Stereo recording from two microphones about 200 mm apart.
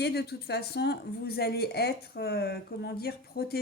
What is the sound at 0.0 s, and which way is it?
Speech, 55° left (ahead or behind).